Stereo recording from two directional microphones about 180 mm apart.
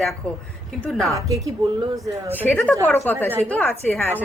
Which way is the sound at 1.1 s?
20° right (ahead or behind).